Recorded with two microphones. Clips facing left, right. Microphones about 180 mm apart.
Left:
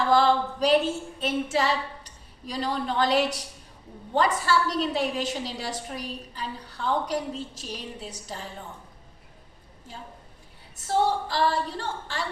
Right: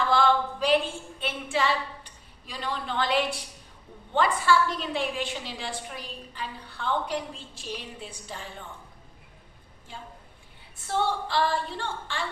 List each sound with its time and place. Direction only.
0.1 s a woman's voice: 40° left (ahead or behind)
10.8 s a woman's voice: 40° left (ahead or behind)